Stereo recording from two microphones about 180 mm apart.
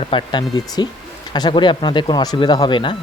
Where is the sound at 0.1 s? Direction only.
25° left (ahead or behind).